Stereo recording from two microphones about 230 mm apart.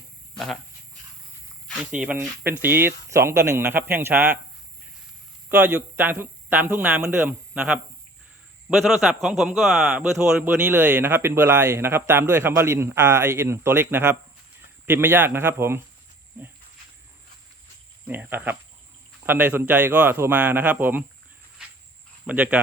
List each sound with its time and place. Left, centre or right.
2.0 s a man's voice: centre
5.5 s a man's voice: centre
18.1 s a man's voice: centre
22.3 s speech: centre